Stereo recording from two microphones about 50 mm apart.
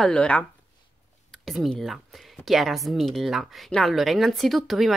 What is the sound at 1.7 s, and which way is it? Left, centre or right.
A woman's voice, centre.